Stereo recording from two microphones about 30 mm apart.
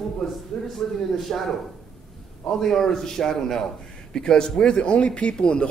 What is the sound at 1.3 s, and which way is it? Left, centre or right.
A man's voice, centre.